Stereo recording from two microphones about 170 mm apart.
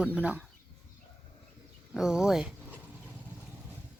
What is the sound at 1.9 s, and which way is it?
Speech, 5° right (ahead or behind).